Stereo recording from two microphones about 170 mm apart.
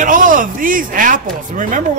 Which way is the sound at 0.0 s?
50° right (ahead or behind).